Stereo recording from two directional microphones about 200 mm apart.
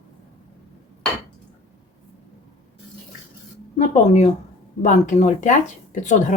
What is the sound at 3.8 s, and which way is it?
Speech, 35° left (ahead or behind).